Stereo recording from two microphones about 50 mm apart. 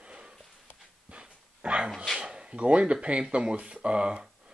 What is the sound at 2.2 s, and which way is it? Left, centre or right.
Speech, centre.